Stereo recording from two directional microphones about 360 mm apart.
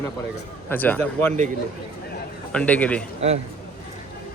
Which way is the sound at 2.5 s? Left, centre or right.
Centre.